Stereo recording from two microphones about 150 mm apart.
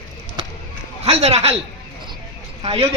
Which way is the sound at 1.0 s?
45° right (ahead or behind).